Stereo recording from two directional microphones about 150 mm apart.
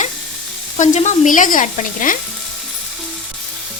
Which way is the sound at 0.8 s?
55° left (ahead or behind).